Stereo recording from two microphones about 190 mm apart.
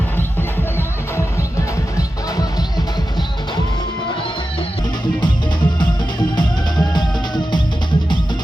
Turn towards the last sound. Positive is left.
turn(degrees=25)  # may be behind; listen again after turning